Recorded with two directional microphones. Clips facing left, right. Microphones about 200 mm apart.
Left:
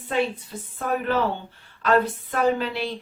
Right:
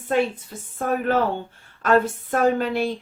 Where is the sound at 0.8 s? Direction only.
45° right (ahead or behind).